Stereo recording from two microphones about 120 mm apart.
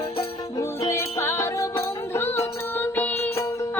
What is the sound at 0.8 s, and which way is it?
Music, 20° left (ahead or behind).